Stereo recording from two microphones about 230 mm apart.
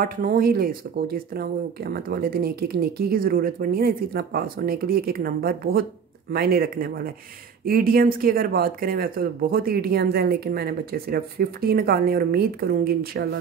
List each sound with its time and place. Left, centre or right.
0.0 s speech: right